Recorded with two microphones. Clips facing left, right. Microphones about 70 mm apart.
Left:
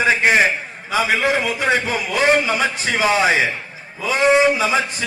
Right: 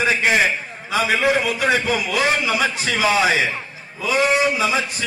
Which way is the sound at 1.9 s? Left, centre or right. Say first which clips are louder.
Left 3 dB; left.